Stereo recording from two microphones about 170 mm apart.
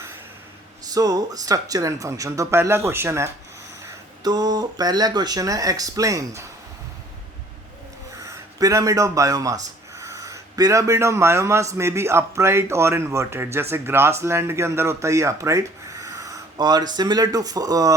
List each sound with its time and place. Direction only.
0.9 s speech: 20° right (ahead or behind)
8.2 s speech: 20° right (ahead or behind)